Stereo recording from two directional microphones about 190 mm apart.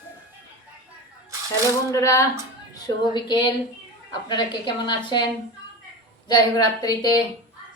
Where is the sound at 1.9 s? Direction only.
15° left (ahead or behind).